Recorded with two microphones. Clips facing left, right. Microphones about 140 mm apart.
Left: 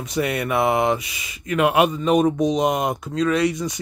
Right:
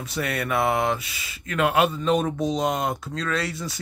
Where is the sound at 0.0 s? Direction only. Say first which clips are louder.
Left 5 dB; centre (ahead or behind).